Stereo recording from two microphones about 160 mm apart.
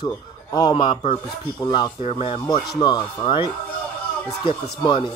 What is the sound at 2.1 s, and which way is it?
Speech, 40° left (ahead or behind).